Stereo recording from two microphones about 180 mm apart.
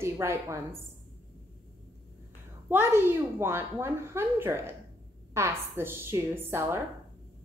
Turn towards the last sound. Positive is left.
turn(degrees=-15)  # may be behind; listen again after turning